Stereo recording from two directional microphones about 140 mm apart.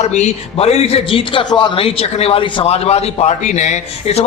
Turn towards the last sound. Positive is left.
turn(degrees=55)  # may be behind; listen again after turning